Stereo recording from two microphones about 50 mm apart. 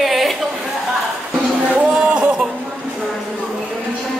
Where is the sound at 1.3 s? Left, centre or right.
Right.